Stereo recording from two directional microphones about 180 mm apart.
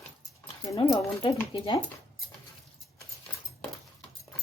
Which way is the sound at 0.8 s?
30° left (ahead or behind).